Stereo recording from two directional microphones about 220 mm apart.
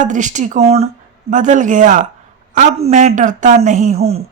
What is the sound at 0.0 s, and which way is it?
Speech, 35° right (ahead or behind).